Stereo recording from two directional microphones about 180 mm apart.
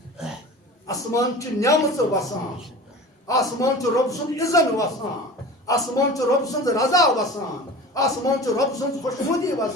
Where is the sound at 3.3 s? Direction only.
20° left (ahead or behind).